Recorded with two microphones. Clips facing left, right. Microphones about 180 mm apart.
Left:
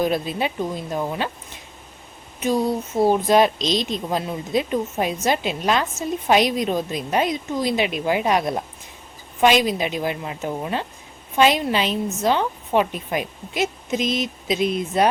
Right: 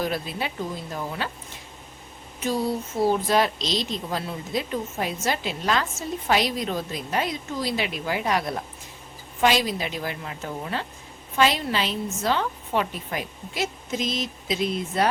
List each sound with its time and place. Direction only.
0.0 s a woman's voice: 20° left (ahead or behind)
3.1 s a woman's voice: 20° left (ahead or behind)